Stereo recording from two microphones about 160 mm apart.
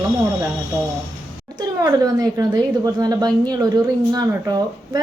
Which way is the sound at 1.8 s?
25° right (ahead or behind).